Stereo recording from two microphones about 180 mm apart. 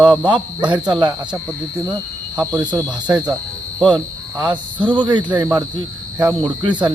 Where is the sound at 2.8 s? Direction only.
5° right (ahead or behind).